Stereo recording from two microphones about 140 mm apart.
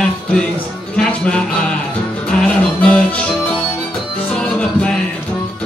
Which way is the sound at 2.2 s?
10° left (ahead or behind).